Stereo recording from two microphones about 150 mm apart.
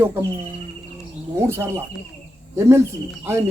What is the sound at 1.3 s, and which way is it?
Speech, 15° right (ahead or behind).